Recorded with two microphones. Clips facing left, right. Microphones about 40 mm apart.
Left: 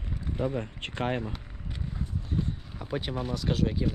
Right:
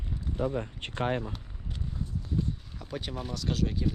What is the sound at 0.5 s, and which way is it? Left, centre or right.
Speech, left.